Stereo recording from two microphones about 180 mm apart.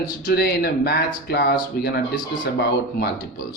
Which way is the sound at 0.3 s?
60° left (ahead or behind).